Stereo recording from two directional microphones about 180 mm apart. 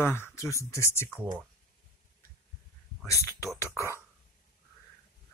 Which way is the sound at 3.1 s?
20° left (ahead or behind).